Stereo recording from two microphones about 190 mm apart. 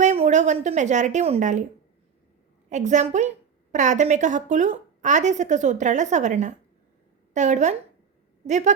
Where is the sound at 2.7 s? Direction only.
40° right (ahead or behind).